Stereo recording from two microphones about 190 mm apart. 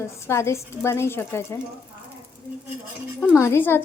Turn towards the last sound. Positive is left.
turn(degrees=10)  # may be behind; listen again after turning